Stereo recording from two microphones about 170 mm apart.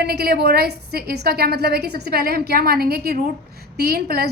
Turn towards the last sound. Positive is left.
turn(degrees=-65)  # may be behind; listen again after turning